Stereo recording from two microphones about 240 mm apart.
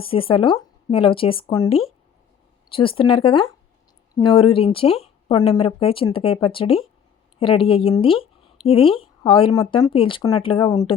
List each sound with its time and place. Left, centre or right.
0.0 s speech: left